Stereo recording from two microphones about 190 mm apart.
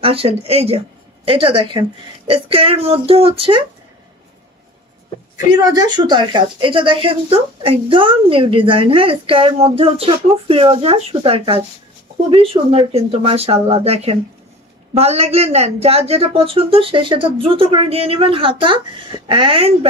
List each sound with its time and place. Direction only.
0.0 s speech: 30° right (ahead or behind)
5.5 s speech: 20° right (ahead or behind)